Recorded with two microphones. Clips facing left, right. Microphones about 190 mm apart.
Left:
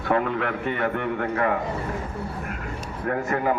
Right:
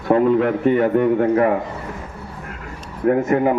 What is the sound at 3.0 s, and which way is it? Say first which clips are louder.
Speech: right 8 dB; 25° right (ahead or behind).